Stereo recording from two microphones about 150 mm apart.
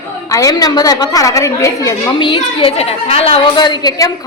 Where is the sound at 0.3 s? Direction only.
20° left (ahead or behind).